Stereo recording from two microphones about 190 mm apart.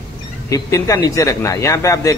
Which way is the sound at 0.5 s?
15° left (ahead or behind).